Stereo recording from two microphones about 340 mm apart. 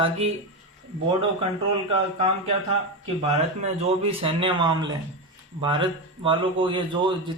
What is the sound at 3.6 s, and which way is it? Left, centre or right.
Speech, centre.